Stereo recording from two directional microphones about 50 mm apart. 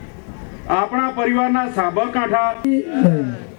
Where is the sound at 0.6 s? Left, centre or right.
Right.